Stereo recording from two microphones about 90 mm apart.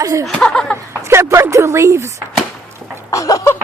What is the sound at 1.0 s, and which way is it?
Speech, 30° right (ahead or behind).